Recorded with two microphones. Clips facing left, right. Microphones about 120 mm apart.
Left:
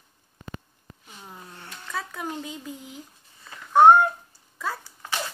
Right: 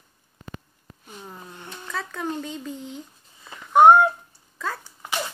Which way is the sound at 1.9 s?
5° left (ahead or behind).